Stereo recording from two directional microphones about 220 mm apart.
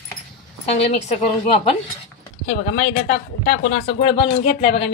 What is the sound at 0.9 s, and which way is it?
Speech, 30° left (ahead or behind).